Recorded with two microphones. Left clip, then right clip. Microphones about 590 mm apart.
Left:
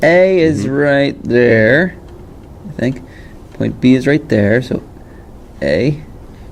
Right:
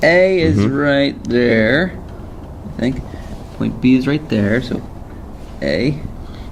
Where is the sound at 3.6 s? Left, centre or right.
Left.